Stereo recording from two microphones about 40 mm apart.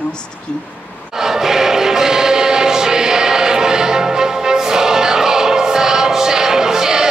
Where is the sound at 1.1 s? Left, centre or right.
Centre.